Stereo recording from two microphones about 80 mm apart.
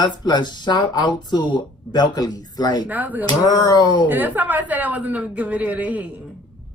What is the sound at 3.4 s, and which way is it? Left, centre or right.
Speech, left.